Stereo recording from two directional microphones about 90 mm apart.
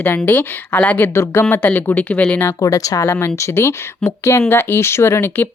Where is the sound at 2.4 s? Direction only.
35° left (ahead or behind).